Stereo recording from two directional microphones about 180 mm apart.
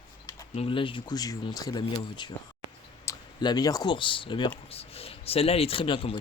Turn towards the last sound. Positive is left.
turn(degrees=30)  # may be behind; listen again after turning